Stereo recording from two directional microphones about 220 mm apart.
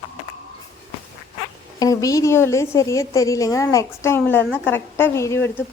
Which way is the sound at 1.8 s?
15° left (ahead or behind).